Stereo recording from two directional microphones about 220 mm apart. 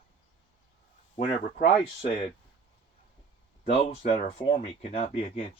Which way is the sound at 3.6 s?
25° left (ahead or behind).